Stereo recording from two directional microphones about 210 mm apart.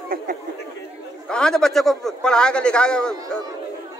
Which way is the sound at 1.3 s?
5° left (ahead or behind).